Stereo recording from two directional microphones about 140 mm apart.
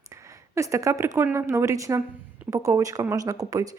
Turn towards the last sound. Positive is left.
turn(degrees=-25)  # may be behind; listen again after turning